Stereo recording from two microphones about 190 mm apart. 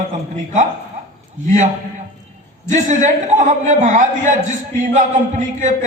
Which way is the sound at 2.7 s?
40° right (ahead or behind).